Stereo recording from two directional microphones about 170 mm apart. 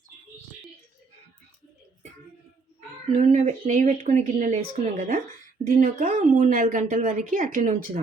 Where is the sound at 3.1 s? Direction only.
45° right (ahead or behind).